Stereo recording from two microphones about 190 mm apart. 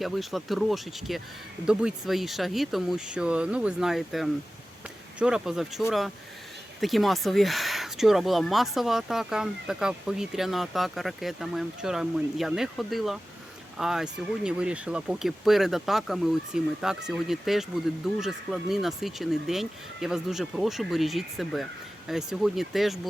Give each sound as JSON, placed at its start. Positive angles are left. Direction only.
{"t": 0.0, "sound": "speech", "side_deg": 0}